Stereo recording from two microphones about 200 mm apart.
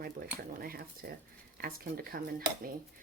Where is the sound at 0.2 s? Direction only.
45° right (ahead or behind).